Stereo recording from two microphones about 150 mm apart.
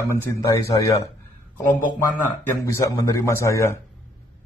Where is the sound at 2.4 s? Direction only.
20° left (ahead or behind).